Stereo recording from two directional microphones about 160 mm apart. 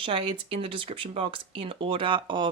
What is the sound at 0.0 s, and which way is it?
Speech, 35° right (ahead or behind).